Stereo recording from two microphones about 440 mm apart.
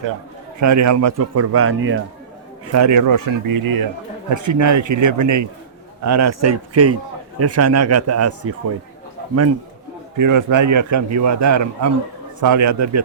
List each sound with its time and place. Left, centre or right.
0.6 s a man's voice: right
2.7 s a man's voice: right
10.2 s a man's voice: right